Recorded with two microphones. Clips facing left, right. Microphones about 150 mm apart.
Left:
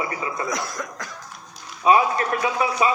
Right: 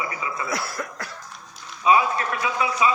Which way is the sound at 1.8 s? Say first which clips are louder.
Left 2 dB; 45° left (ahead or behind).